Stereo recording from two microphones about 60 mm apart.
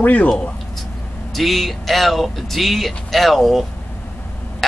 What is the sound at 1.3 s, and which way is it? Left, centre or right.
Speech, centre.